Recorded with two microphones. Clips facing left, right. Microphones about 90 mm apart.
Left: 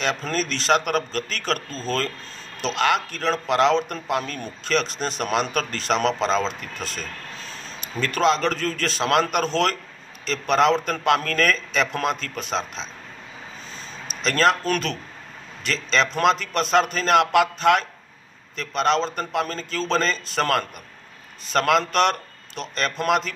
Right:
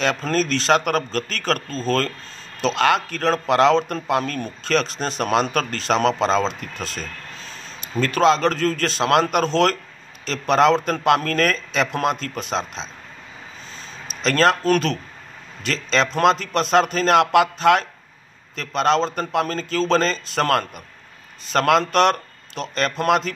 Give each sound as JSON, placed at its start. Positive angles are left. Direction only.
{"t": 0.0, "sound": "a man's voice", "side_deg": -40}
{"t": 14.5, "sound": "a man's voice", "side_deg": -30}
{"t": 18.6, "sound": "a man's voice", "side_deg": -30}